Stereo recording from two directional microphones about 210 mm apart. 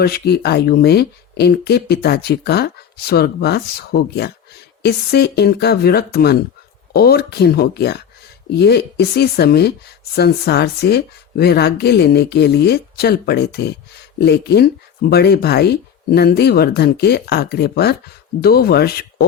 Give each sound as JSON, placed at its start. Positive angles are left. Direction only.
{"t": 0.0, "sound": "speech", "side_deg": 50}